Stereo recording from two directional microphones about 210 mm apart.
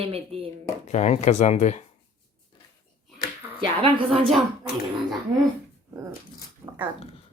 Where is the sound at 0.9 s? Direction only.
35° left (ahead or behind).